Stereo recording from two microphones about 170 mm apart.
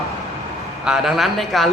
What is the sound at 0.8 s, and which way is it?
Speech, 5° right (ahead or behind).